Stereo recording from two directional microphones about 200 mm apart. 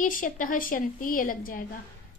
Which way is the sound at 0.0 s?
40° left (ahead or behind).